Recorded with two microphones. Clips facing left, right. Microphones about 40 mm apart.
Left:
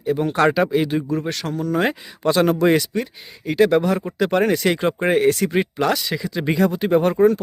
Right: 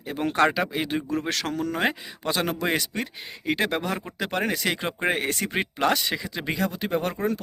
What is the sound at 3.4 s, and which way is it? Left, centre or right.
Speech, right.